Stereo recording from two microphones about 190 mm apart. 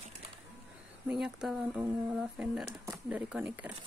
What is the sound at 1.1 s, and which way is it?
Speech, 5° right (ahead or behind).